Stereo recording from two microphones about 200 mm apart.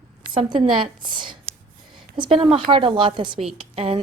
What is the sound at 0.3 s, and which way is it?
A woman's voice, 25° right (ahead or behind).